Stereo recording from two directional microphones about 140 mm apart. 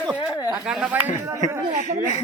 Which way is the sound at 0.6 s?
5° right (ahead or behind).